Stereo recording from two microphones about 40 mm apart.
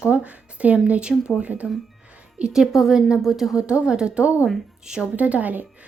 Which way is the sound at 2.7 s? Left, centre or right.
Centre.